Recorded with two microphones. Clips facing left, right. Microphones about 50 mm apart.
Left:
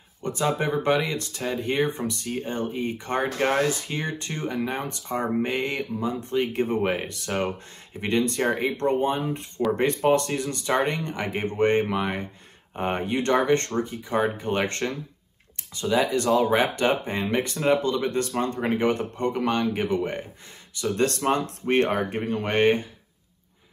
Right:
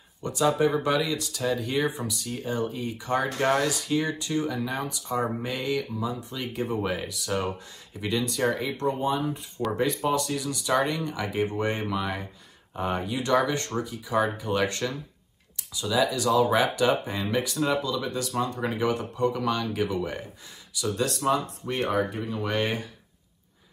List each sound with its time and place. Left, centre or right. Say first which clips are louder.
0.2 s speech: right 2 dB; left
3.3 s speech: left 3 dB; left
11.9 s speech: left 3 dB; left
17.8 s speech: left 5 dB; left
19.3 s speech: left 3 dB; left
20.9 s speech: left 2 dB; left